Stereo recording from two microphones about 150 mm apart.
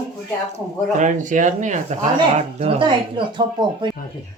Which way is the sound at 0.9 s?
55° right (ahead or behind).